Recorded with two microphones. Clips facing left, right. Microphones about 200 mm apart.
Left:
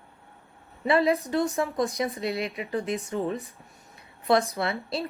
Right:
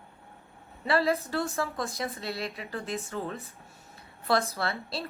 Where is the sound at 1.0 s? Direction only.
15° left (ahead or behind).